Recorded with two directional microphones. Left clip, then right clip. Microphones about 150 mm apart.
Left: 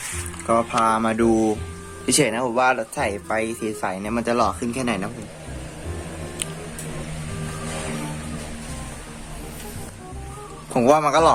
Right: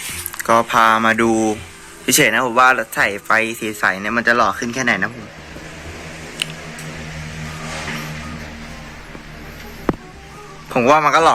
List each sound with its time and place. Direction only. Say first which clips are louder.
0.4 s speech: right 6 dB; 5° right (ahead or behind)
1.3 s speech: right 2 dB; 20° right (ahead or behind)
2.0 s speech: right 6 dB; 5° left (ahead or behind)
10.8 s a man's voice: right 4 dB; 10° left (ahead or behind)